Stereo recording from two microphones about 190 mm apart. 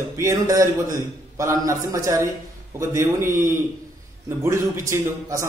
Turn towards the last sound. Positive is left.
turn(degrees=-15)  # may be behind; listen again after turning